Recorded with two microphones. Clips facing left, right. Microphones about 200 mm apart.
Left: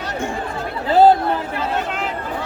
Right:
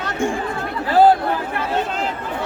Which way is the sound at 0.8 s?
25° left (ahead or behind).